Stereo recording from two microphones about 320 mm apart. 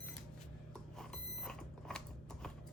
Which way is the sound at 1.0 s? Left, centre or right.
Centre.